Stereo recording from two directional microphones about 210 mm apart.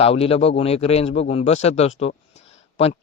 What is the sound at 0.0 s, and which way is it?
Speech, 30° left (ahead or behind).